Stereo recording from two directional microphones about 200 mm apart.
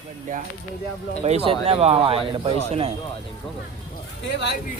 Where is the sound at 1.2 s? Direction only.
30° right (ahead or behind).